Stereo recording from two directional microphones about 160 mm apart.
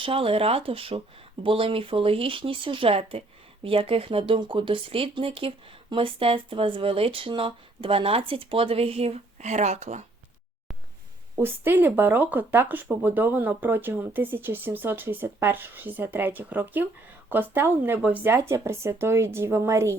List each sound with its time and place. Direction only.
0.0 s speech: 35° right (ahead or behind)
11.3 s speech: 15° right (ahead or behind)